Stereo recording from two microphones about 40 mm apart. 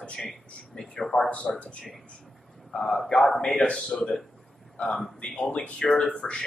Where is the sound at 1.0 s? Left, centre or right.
Centre.